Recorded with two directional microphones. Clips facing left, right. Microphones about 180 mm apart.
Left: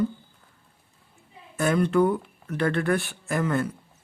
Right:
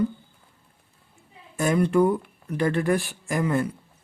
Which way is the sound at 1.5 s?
10° right (ahead or behind).